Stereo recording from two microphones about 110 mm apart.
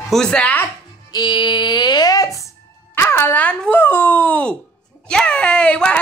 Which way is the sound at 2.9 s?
20° left (ahead or behind).